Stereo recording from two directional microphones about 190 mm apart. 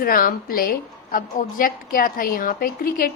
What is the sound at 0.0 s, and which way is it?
A woman's voice, 50° left (ahead or behind).